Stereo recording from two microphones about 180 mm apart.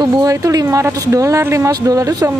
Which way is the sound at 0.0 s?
20° right (ahead or behind).